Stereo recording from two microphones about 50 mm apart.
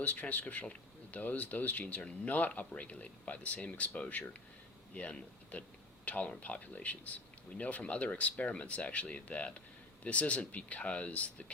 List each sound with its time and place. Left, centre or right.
0.0 s speech: left
0.6 s a sound: left
1.2 s speech: left
5.5 s speech: left